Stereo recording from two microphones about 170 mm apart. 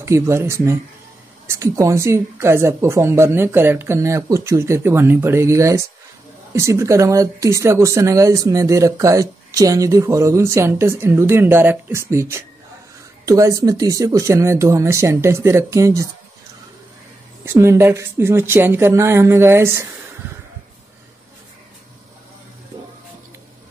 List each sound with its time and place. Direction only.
0.0 s speech: 15° right (ahead or behind)
17.5 s speech: 15° right (ahead or behind)